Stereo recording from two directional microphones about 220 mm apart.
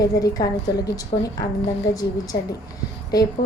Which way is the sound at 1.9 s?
15° left (ahead or behind).